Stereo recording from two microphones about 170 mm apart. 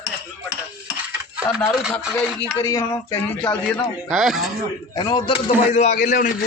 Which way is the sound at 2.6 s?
20° left (ahead or behind).